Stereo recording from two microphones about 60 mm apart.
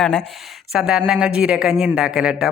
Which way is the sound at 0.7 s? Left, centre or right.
Centre.